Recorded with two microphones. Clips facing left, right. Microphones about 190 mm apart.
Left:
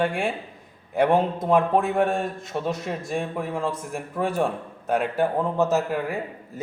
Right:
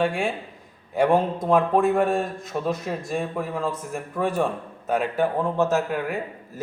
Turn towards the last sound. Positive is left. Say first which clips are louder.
# even
turn(degrees=0)  # may be behind; listen again after turning